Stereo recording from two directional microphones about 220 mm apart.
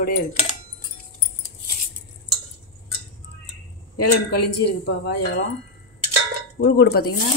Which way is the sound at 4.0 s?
90° left.